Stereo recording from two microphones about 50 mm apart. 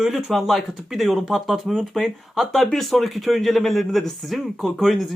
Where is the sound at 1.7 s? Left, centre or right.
Centre.